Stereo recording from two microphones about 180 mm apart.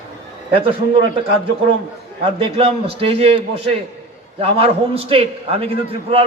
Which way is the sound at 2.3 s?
30° right (ahead or behind).